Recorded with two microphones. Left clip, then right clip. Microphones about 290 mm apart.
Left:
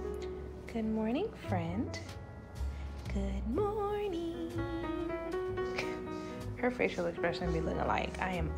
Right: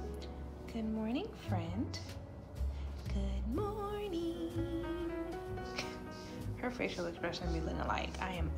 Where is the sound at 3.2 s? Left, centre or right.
Centre.